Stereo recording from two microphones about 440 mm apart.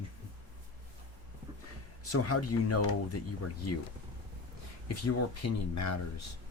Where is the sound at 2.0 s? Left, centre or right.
Left.